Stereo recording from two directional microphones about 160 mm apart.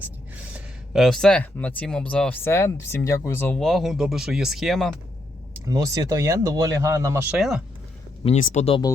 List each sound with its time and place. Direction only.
0.0 s speech: 10° right (ahead or behind)
5.6 s speech: 20° right (ahead or behind)
7.3 s speech: centre (ahead or behind)
8.2 s speech: 40° left (ahead or behind)